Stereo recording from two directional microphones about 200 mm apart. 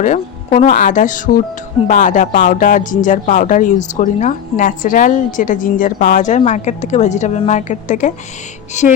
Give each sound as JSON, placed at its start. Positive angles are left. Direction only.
{"t": 0.0, "sound": "speech", "side_deg": 35}